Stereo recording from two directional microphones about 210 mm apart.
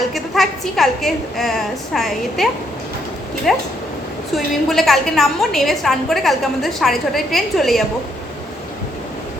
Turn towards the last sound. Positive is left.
turn(degrees=0)  # may be behind; listen again after turning